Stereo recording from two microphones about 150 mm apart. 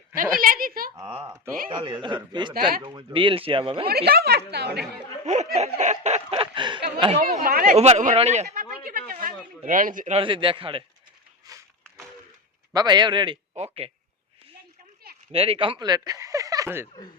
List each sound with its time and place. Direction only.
0.3 s a woman's voice: 70° right (ahead or behind)
0.9 s speech: 35° right (ahead or behind)
3.8 s a woman's voice: 90° right
5.2 s speech: 50° right (ahead or behind)
7.4 s a woman's voice: 75° right (ahead or behind)
7.8 s speech: 50° right (ahead or behind)
8.8 s a sound: 70° right (ahead or behind)
10.2 s speech: 35° right (ahead or behind)
12.7 s speech: 30° right (ahead or behind)
15.3 s speech: 40° right (ahead or behind); by 16.9 s 15° right (ahead or behind)